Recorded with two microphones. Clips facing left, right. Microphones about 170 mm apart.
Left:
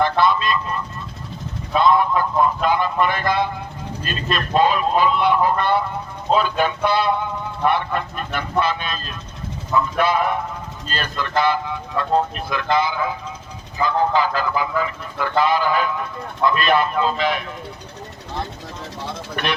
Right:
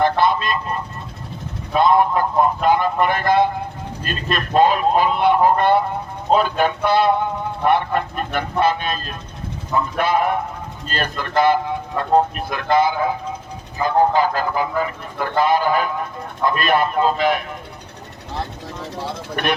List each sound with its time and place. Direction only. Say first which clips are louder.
0.0 s vehicle: right 1 dB; 50° right (ahead or behind)
1.7 s speech: right 1 dB; 50° right (ahead or behind)